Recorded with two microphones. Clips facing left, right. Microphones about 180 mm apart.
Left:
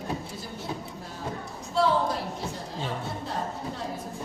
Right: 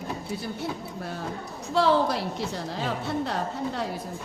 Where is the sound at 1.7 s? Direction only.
80° right.